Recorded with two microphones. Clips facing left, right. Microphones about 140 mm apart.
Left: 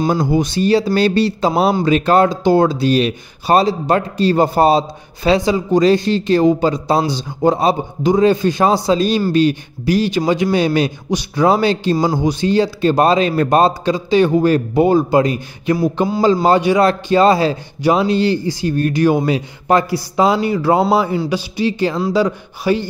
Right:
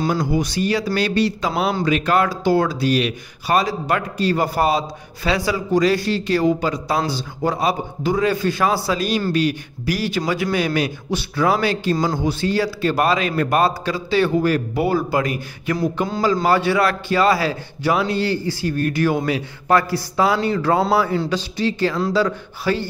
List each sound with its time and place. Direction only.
0.0 s speech: 25° left (ahead or behind)